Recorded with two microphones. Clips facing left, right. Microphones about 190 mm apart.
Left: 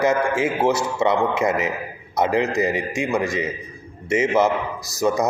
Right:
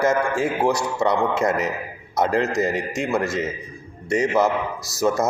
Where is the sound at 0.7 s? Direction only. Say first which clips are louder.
Left 1 dB; 20° left (ahead or behind).